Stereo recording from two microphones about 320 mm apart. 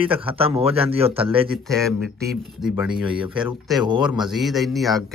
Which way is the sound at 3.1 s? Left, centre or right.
Centre.